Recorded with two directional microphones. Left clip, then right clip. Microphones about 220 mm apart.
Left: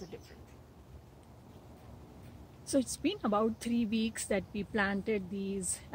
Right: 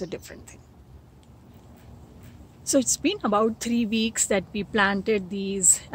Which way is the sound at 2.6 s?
5° right (ahead or behind).